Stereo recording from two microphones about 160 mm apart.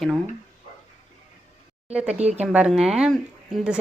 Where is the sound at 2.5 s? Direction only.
5° right (ahead or behind).